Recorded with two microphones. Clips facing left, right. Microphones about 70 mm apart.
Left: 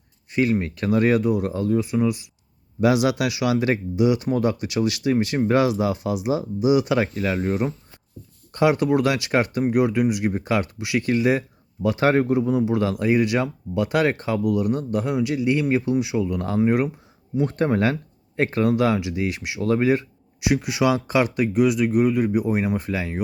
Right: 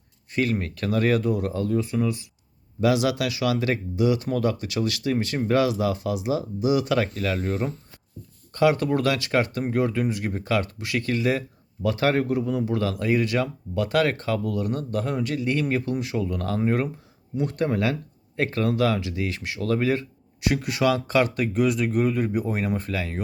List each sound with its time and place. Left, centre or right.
0.3 s speech: centre
17.3 s speech: left
20.5 s speech: centre